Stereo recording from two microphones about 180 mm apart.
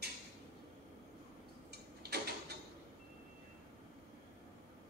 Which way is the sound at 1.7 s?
60° right (ahead or behind).